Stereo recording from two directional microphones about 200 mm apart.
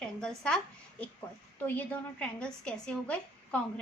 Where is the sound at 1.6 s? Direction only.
10° left (ahead or behind).